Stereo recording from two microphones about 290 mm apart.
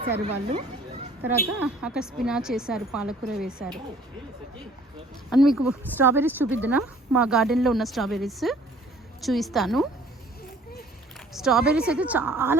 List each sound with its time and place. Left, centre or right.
0.0 s speech: right
1.5 s a woman's voice: centre
5.3 s a woman's voice: centre
11.3 s a woman's voice: centre